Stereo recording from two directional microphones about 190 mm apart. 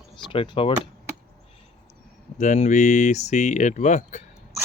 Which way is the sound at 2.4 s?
40° left (ahead or behind).